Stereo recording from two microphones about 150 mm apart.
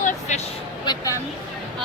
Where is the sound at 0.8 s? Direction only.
25° left (ahead or behind).